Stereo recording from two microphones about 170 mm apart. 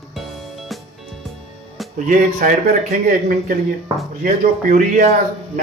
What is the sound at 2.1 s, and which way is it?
Speech, 50° right (ahead or behind).